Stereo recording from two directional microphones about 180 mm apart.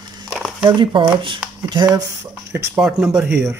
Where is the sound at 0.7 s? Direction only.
25° right (ahead or behind).